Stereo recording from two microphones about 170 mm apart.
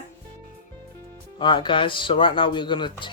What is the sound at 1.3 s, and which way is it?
Speech, 25° left (ahead or behind).